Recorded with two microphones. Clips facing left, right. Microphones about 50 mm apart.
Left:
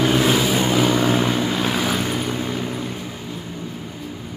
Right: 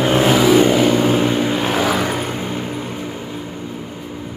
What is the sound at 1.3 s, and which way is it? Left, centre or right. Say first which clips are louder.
Vehicle: right 3 dB; right.